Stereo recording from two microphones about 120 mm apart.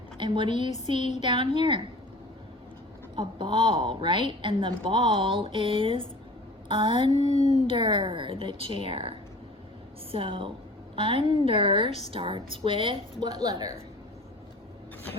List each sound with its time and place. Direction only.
0.2 s a woman's voice: 40° right (ahead or behind)
0.7 s a sound: 75° left (ahead or behind)
1.2 s a woman's voice: 45° right (ahead or behind)
3.2 s a woman's voice: 40° right (ahead or behind)
7.0 s a sound: 70° left (ahead or behind)
7.7 s a woman's voice: 40° right (ahead or behind)
13.2 s a woman's voice: 30° right (ahead or behind)